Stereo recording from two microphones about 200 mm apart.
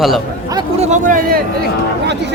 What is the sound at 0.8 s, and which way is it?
Speech, 40° right (ahead or behind).